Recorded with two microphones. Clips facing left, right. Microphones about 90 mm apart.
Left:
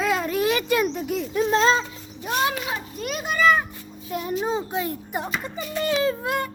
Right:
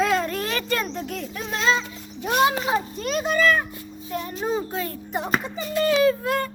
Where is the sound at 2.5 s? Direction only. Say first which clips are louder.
Right 4 dB; 35° right (ahead or behind).